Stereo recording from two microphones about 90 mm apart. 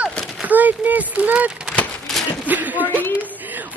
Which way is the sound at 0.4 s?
20° right (ahead or behind).